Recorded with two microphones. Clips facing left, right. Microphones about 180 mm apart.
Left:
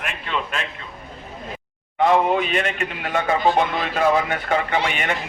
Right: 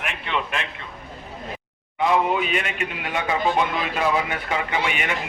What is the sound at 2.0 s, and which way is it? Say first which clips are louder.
A man's voice: left 3 dB; 45° left (ahead or behind).